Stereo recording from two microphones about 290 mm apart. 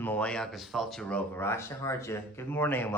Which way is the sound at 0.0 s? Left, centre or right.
Centre.